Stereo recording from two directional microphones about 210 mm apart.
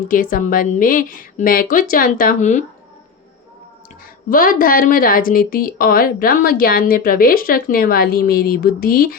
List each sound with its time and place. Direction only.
0.1 s a woman's voice: 40° left (ahead or behind)
4.3 s a woman's voice: 40° left (ahead or behind)